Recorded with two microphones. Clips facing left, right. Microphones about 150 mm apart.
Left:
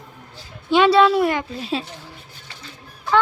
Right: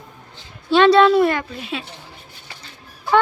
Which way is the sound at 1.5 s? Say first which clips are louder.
Left 3 dB; 35° left (ahead or behind).